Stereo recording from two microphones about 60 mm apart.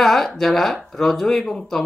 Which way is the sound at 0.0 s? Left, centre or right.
Centre.